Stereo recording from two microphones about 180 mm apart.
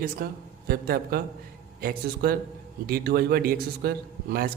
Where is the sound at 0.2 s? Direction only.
55° right (ahead or behind).